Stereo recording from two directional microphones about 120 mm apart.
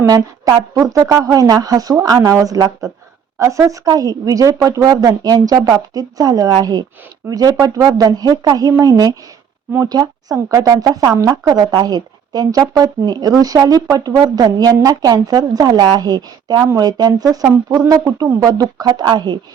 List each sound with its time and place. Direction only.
0.0 s a woman's voice: 30° right (ahead or behind)